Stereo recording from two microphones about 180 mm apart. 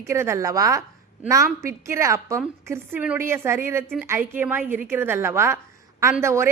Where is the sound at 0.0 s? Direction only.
15° right (ahead or behind).